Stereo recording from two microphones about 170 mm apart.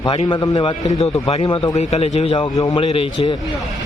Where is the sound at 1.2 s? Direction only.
30° left (ahead or behind).